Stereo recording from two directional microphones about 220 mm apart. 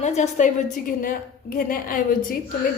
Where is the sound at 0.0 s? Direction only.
30° left (ahead or behind).